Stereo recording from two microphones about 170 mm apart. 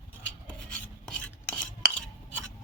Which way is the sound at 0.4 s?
5° left (ahead or behind).